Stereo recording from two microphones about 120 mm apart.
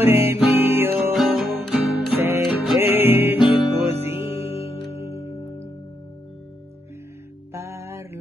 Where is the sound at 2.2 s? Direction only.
20° right (ahead or behind).